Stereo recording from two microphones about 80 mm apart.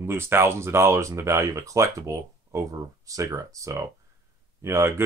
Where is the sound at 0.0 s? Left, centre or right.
Right.